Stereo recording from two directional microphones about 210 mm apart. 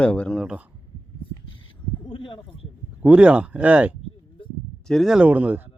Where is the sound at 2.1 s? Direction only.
25° left (ahead or behind).